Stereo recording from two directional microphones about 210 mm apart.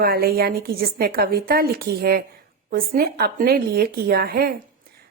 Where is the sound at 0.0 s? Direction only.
45° right (ahead or behind).